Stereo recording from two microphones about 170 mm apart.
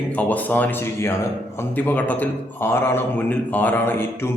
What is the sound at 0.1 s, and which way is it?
Speech, 10° left (ahead or behind).